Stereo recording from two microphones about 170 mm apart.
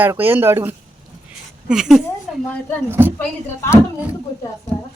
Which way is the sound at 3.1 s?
15° left (ahead or behind).